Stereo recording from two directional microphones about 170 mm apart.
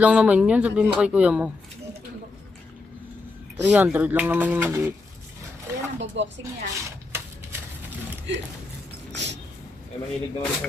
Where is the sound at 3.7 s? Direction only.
10° right (ahead or behind).